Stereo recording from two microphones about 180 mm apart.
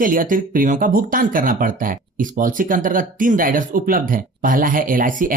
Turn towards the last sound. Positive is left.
turn(degrees=-50)  # may be behind; listen again after turning